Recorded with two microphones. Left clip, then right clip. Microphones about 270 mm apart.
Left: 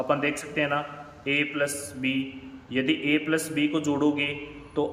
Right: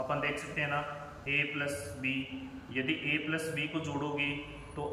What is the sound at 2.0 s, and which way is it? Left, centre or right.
Speech, left.